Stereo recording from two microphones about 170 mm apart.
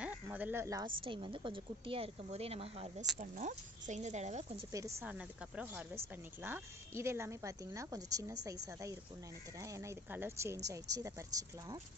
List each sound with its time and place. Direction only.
0.0 s snake: 10° right (ahead or behind)
1.0 s a woman's voice: 30° right (ahead or behind)
5.0 s a woman's voice: 5° right (ahead or behind)